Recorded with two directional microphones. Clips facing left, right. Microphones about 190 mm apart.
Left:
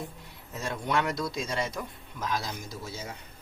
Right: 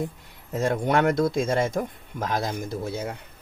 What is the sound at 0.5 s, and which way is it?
Speech, 50° right (ahead or behind).